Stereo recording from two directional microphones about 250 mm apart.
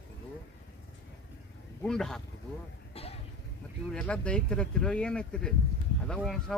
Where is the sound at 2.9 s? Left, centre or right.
Left.